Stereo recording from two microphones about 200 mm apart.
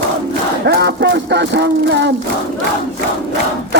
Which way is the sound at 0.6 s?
60° right (ahead or behind).